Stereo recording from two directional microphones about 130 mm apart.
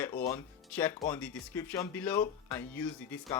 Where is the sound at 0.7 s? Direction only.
15° left (ahead or behind).